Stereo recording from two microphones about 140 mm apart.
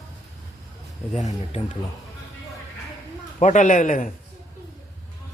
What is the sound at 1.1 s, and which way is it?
Speech, 55° left (ahead or behind).